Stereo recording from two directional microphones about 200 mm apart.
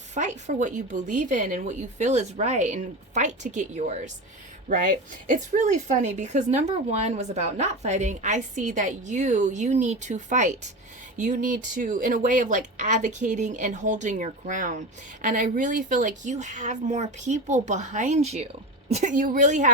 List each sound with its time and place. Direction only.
0.1 s speech: 35° right (ahead or behind)